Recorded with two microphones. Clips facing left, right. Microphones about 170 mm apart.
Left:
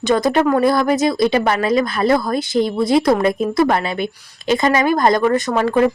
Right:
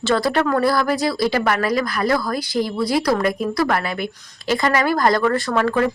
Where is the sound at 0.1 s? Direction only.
20° left (ahead or behind).